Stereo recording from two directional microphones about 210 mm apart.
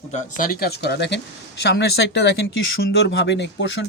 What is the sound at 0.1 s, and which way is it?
A man's voice, 40° left (ahead or behind).